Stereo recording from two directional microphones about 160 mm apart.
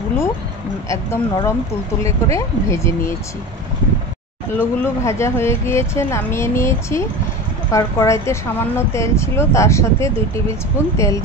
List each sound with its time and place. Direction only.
0.8 s speech: 20° left (ahead or behind)
4.6 s speech: 15° left (ahead or behind)